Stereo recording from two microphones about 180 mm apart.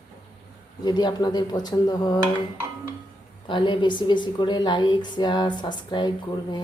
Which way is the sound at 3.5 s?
25° left (ahead or behind).